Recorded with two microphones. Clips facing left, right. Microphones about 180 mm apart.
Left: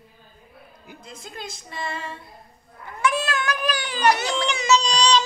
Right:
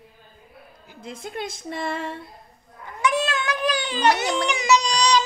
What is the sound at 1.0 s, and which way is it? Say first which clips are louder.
A woman's voice: right 7 dB; 60° right (ahead or behind).